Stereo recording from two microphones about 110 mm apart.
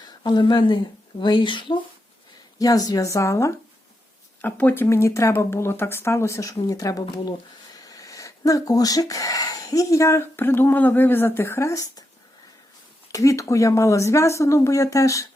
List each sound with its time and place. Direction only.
0.0 s speech: 40° left (ahead or behind)
2.6 s speech: 35° left (ahead or behind)
13.1 s speech: 30° left (ahead or behind)